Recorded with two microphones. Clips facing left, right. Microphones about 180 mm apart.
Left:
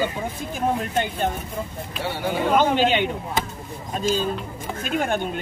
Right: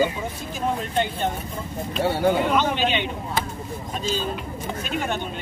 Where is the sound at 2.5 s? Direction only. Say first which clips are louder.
Left 3 dB; 45° left (ahead or behind).